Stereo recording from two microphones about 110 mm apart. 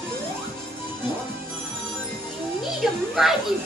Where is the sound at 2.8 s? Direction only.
Centre (ahead or behind).